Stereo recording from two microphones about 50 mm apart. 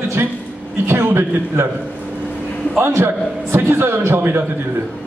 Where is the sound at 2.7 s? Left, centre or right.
Right.